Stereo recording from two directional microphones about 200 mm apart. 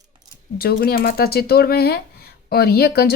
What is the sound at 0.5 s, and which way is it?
Speech, 50° left (ahead or behind).